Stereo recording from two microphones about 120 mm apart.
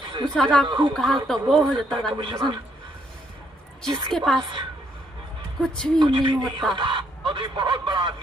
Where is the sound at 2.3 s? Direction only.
40° right (ahead or behind).